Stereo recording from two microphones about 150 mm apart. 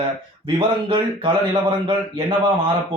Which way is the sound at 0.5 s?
35° right (ahead or behind).